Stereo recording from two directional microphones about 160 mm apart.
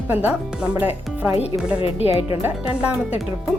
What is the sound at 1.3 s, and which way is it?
Speech, 40° left (ahead or behind).